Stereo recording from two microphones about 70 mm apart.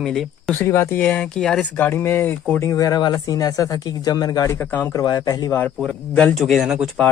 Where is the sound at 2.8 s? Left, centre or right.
Left.